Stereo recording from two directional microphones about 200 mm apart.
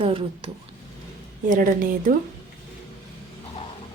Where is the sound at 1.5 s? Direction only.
40° right (ahead or behind).